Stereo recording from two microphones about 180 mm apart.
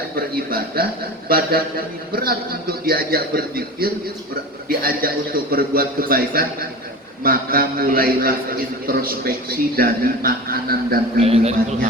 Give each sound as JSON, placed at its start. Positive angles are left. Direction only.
{"t": 0.3, "sound": "a man's voice", "side_deg": -55}
{"t": 11.2, "sound": "a man's voice", "side_deg": -35}